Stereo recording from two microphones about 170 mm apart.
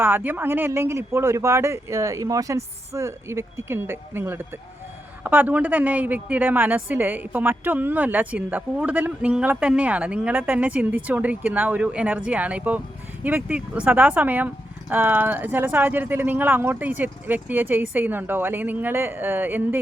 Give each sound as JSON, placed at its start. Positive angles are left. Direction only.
{"t": 0.0, "sound": "a woman's voice", "side_deg": -10}